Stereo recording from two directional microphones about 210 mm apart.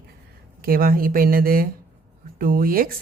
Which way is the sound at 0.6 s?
45° right (ahead or behind).